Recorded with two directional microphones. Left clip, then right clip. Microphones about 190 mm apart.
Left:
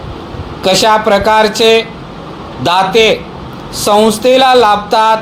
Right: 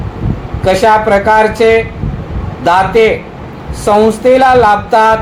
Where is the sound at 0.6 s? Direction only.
30° left (ahead or behind).